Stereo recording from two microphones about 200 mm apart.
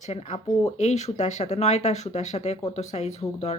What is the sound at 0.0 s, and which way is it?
Speech, 35° left (ahead or behind).